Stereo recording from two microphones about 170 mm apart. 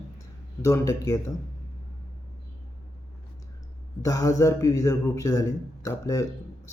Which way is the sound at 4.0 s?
20° left (ahead or behind).